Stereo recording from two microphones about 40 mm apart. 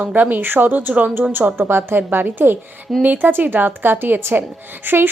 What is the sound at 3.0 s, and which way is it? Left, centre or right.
A woman's voice, right.